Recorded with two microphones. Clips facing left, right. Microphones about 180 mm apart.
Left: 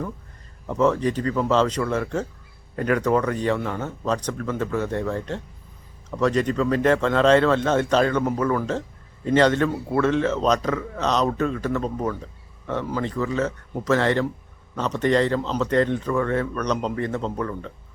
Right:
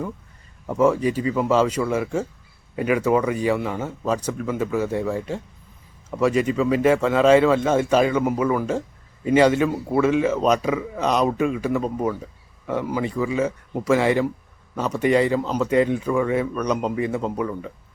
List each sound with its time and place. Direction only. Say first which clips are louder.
0.7 s speech: right 2 dB; 10° right (ahead or behind)